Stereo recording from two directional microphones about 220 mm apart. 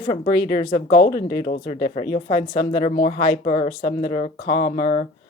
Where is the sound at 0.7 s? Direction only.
40° left (ahead or behind).